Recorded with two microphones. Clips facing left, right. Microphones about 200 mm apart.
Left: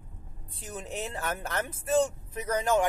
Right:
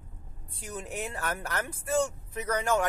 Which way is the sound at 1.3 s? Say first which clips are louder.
Left 1 dB; 20° left (ahead or behind).